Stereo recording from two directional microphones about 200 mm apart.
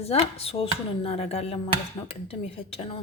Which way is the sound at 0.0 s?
30° left (ahead or behind).